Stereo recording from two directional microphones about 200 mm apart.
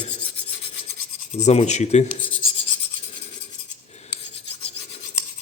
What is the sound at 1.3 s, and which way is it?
Speech, 35° left (ahead or behind).